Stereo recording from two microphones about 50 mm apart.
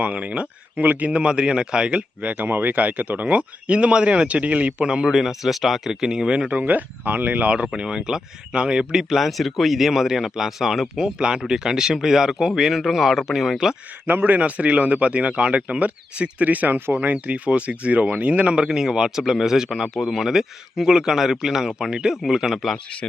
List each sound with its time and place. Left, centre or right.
0.0 s speech: right
5.0 s speech: centre; by 7.4 s right
7.4 s speech: right; by 13.7 s centre
14.1 s a man's voice: right
14.3 s speech: right; by 22.8 s centre